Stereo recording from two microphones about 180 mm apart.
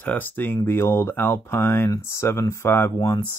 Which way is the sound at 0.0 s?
10° left (ahead or behind).